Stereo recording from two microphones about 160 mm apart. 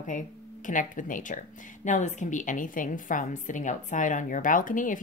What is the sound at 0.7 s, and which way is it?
A woman's voice, 55° left (ahead or behind).